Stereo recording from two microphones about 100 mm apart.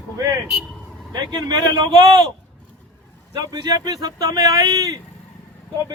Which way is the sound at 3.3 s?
40° right (ahead or behind).